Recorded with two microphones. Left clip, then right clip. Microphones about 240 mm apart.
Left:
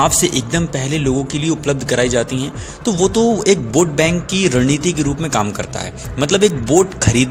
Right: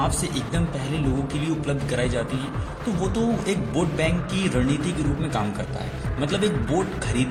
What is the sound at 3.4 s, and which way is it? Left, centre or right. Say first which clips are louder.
Speech: left 11 dB; left.